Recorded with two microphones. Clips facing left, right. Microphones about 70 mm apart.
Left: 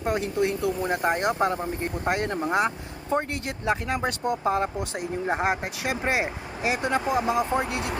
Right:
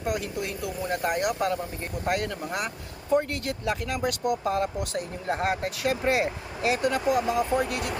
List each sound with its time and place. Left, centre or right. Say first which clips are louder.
0.0 s speech: left 5 dB; left